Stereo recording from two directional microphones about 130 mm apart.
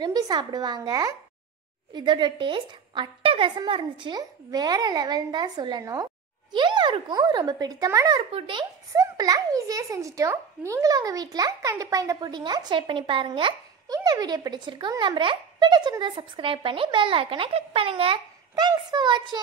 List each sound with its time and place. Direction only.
0.0 s a child's voice: 30° right (ahead or behind)
8.3 s a child's voice: 40° right (ahead or behind)
8.9 s a child's voice: 30° right (ahead or behind)
13.9 s a child's voice: 30° right (ahead or behind)
18.5 s a child's voice: 30° right (ahead or behind)